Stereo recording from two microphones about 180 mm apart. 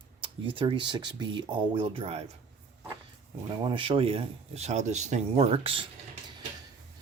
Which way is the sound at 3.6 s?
25° right (ahead or behind).